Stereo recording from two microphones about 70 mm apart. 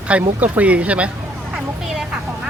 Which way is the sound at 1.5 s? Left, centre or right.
Centre.